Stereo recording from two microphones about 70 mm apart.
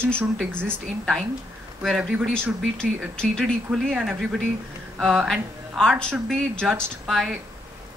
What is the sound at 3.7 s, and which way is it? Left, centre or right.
Speech, right.